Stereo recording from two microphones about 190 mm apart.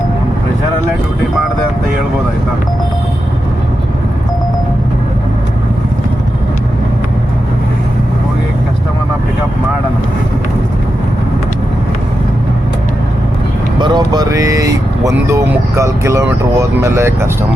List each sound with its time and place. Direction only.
13.7 s vehicle: 25° right (ahead or behind)